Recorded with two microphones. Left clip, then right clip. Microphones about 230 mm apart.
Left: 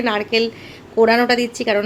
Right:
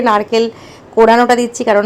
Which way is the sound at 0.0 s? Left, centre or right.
Centre.